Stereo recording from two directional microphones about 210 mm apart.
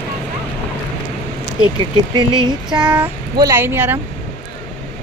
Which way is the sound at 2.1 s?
20° right (ahead or behind).